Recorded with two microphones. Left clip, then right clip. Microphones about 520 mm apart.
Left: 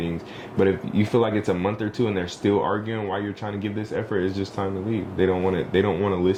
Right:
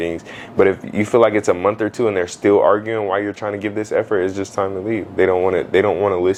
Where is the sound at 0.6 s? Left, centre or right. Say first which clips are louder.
Right 6 dB; right.